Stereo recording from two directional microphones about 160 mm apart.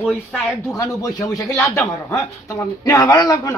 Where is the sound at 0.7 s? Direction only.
20° left (ahead or behind).